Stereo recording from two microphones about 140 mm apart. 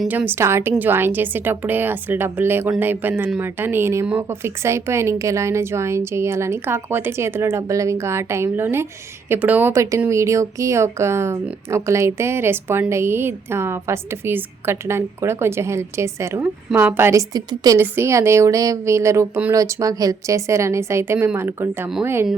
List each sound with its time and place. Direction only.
0.1 s a woman's voice: 15° right (ahead or behind)